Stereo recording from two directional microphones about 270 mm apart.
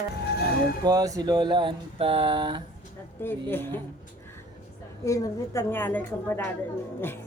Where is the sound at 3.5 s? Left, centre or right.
Centre.